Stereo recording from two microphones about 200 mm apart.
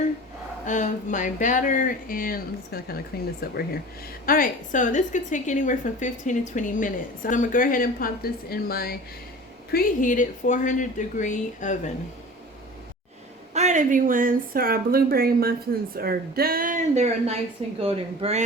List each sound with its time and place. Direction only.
0.6 s a woman's voice: 40° left (ahead or behind)
13.5 s a woman's voice: 35° right (ahead or behind)